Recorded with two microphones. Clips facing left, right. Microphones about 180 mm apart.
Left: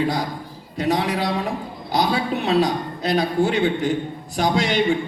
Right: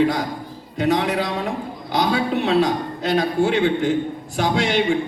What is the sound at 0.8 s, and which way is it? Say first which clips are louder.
A man's voice: right 2 dB; 35° left (ahead or behind).